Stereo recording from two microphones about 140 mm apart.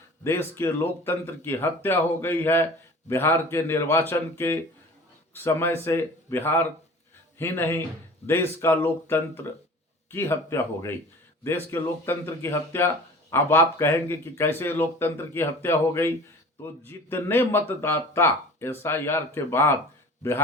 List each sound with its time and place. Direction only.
0.3 s speech: 20° left (ahead or behind)